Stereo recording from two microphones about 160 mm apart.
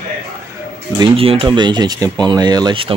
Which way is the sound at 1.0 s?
35° right (ahead or behind).